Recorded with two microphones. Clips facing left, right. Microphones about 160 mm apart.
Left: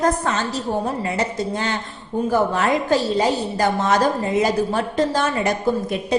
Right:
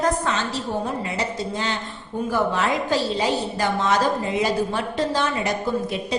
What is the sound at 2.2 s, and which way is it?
A woman's voice, 45° left (ahead or behind).